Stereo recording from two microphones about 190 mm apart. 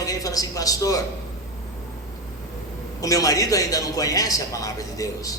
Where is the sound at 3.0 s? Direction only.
20° left (ahead or behind).